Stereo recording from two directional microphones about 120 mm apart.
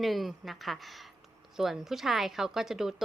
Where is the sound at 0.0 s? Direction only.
Centre (ahead or behind).